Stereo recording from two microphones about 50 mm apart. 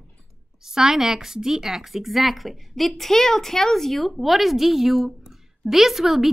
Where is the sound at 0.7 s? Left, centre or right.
Centre.